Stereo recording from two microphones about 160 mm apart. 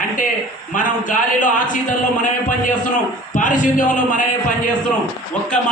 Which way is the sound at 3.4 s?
55° left (ahead or behind).